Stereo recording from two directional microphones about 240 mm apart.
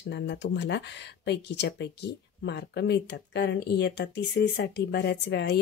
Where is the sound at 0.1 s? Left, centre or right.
Left.